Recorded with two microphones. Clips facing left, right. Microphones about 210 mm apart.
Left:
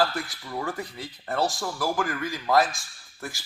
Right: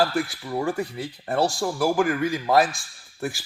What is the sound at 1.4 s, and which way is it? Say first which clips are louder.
Speech: right 4 dB; 30° right (ahead or behind).